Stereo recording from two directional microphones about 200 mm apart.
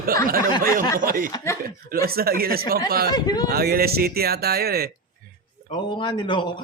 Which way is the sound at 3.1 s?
20° left (ahead or behind).